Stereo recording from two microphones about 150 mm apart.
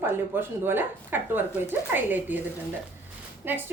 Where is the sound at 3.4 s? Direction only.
15° right (ahead or behind).